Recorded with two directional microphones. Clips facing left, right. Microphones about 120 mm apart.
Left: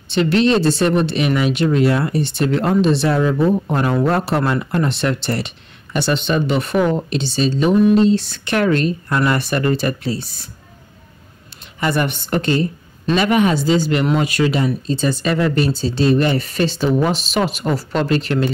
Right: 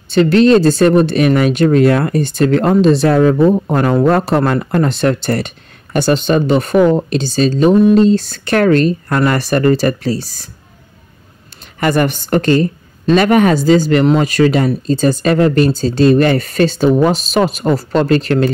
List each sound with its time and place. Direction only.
0.1 s speech: 40° right (ahead or behind)
11.8 s speech: 50° right (ahead or behind)
12.1 s speech: 40° right (ahead or behind)